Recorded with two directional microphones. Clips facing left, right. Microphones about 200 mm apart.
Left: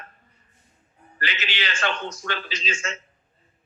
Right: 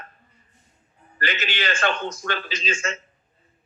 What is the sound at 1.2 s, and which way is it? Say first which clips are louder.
A man's voice: right 3 dB; 50° right (ahead or behind).